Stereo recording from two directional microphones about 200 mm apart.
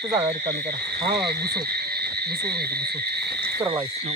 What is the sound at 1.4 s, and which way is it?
Speech, 50° right (ahead or behind).